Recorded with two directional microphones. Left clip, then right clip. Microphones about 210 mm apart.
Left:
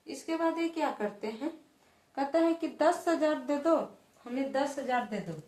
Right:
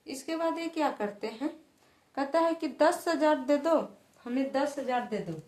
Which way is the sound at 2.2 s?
45° right (ahead or behind).